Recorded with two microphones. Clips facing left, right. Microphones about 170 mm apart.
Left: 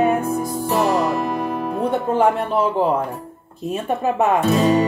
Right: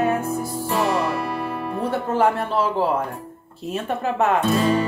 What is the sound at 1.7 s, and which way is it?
Speech, 15° left (ahead or behind).